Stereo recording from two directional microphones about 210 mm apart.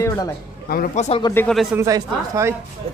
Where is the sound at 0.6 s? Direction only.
45° left (ahead or behind).